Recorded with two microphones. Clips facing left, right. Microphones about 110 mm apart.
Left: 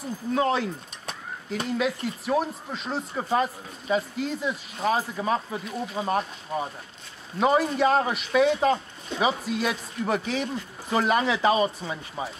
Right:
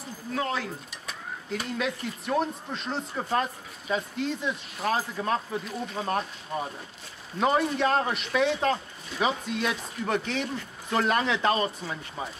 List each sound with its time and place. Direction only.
0.3 s speech: 20° left (ahead or behind)
1.7 s speech: centre (ahead or behind)